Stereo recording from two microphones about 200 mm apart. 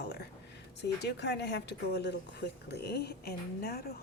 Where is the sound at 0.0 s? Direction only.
55° left (ahead or behind).